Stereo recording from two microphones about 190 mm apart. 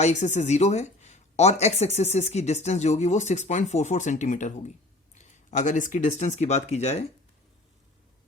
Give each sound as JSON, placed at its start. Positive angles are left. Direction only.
{"t": 0.0, "sound": "speech", "side_deg": 40}